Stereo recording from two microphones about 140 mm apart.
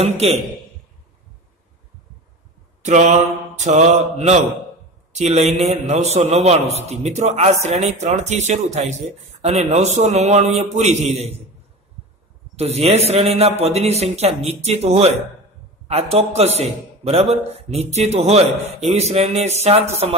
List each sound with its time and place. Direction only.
0.2 s speech: 50° right (ahead or behind)
2.8 s mantra: 55° right (ahead or behind)
5.1 s speech: 50° right (ahead or behind)
12.5 s speech: 50° right (ahead or behind)